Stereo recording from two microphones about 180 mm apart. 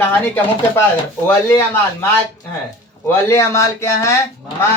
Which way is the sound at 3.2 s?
15° left (ahead or behind).